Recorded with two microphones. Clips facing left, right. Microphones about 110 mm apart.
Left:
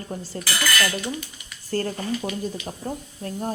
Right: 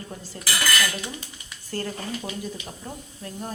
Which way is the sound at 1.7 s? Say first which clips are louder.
Left 5 dB; 45° left (ahead or behind).